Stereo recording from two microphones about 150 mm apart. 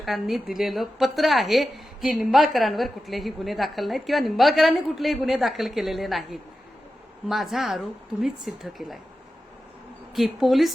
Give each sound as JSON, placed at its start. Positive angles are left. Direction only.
{"t": 0.0, "sound": "a woman's voice", "side_deg": 0}
{"t": 10.2, "sound": "a woman's voice", "side_deg": 0}